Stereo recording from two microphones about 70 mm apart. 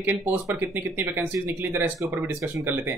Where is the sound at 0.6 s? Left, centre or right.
Right.